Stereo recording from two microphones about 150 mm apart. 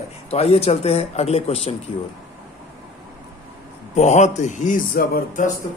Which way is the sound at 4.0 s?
50° left (ahead or behind).